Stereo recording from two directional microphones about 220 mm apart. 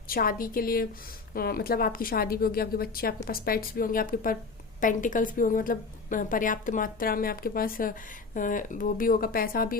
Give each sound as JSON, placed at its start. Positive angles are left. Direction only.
{"t": 0.1, "sound": "a woman's voice", "side_deg": 40}